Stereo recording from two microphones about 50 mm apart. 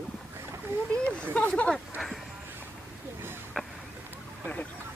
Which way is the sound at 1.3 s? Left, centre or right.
Left.